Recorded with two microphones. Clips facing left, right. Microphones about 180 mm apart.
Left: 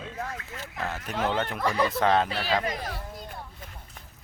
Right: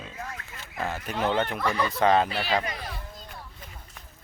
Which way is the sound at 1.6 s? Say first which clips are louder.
Left 1 dB; 35° left (ahead or behind).